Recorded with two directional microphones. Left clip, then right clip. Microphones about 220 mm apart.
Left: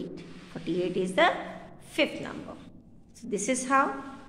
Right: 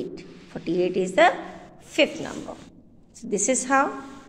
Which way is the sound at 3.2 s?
20° right (ahead or behind).